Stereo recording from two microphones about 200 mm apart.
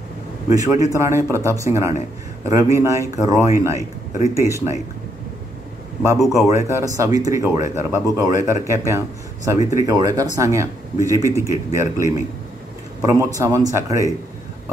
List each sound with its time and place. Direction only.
0.5 s speech: 15° right (ahead or behind)
1.9 s a man's voice: 35° left (ahead or behind)
2.5 s speech: 15° right (ahead or behind)
6.1 s speech: centre (ahead or behind)
6.4 s speech: 15° right (ahead or behind)